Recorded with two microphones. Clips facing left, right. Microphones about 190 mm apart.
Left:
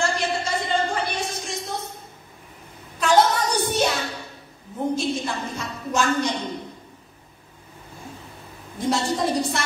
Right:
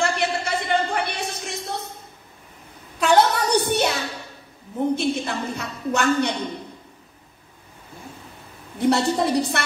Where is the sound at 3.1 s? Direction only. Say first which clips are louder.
Right 1 dB; 65° right (ahead or behind).